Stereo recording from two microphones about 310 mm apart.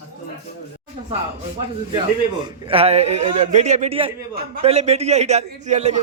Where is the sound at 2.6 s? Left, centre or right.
Centre.